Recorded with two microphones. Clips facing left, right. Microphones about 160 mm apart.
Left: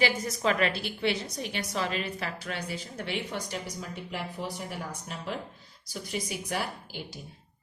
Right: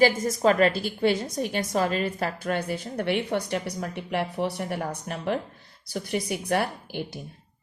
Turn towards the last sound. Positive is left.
turn(degrees=-60)  # may be behind; listen again after turning